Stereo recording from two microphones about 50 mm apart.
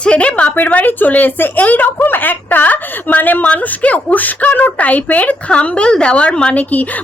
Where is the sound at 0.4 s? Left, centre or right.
Left.